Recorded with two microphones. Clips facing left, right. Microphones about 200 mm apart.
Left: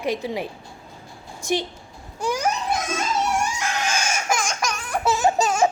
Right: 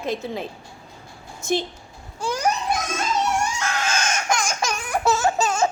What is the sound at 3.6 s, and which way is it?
Chicken, 15° left (ahead or behind).